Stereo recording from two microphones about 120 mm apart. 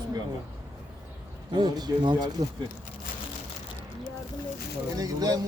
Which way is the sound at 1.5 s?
35° right (ahead or behind).